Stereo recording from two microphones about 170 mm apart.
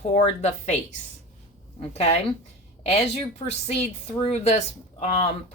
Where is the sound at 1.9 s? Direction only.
40° left (ahead or behind).